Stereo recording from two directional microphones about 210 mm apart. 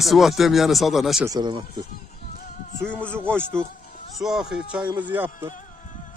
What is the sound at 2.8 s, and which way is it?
Speech, 5° left (ahead or behind).